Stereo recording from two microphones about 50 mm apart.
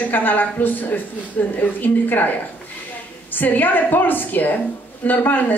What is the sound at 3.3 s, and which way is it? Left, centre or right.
Speech, left.